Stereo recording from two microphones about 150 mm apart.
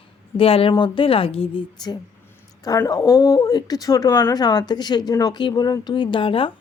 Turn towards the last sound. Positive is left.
turn(degrees=35)  # may be behind; listen again after turning